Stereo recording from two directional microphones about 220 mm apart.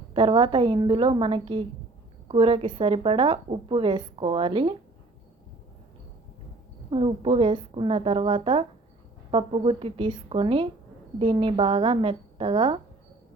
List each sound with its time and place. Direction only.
0.1 s a woman's voice: 25° right (ahead or behind)
6.9 s a woman's voice: 25° right (ahead or behind)